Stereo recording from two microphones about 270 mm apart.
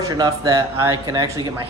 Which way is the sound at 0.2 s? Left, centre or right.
Centre.